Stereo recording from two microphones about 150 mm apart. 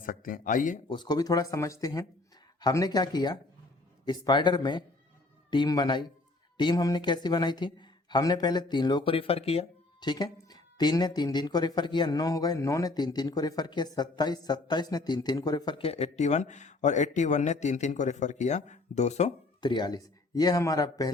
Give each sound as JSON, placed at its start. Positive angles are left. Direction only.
{"t": 0.0, "sound": "speech", "side_deg": 65}
{"t": 0.9, "sound": "speech", "side_deg": 30}
{"t": 10.0, "sound": "speech", "side_deg": 30}
{"t": 19.6, "sound": "speech", "side_deg": 30}